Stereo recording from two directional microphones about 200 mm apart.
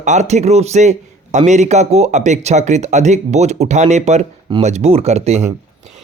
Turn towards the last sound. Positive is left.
turn(degrees=-35)  # may be behind; listen again after turning